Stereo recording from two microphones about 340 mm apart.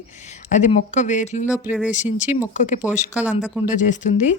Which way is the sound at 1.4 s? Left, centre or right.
Centre.